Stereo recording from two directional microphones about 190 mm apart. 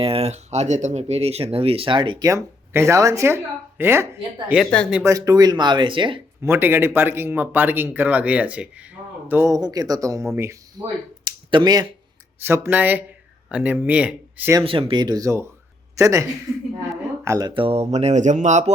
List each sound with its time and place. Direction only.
0.0 s speech: 30° right (ahead or behind); by 4.0 s 10° right (ahead or behind)
4.4 s speech: centre (ahead or behind)
4.9 s speech: 15° right (ahead or behind)
6.4 s speech: 10° right (ahead or behind)
11.2 s a sound: 25° right (ahead or behind)
12.4 s speech: 15° right (ahead or behind)
14.6 s speech: 30° right (ahead or behind)